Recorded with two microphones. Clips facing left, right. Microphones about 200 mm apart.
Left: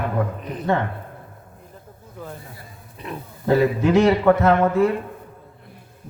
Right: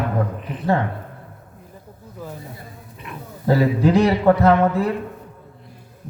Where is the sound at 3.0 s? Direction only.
35° left (ahead or behind).